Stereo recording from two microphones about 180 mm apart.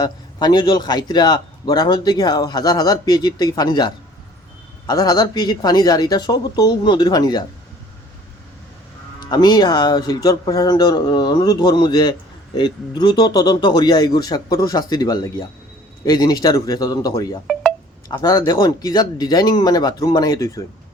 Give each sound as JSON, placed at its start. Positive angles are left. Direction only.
{"t": 0.0, "sound": "a man's voice", "side_deg": 20}
{"t": 9.3, "sound": "a man's voice", "side_deg": 25}
{"t": 17.4, "sound": "speech", "side_deg": 0}
{"t": 18.1, "sound": "a man's voice", "side_deg": 20}